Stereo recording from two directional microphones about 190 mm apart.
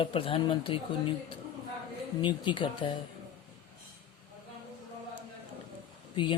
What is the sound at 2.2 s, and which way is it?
Speech, 25° left (ahead or behind).